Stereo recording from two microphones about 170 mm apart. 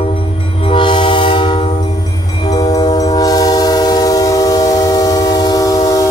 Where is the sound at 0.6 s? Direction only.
30° left (ahead or behind).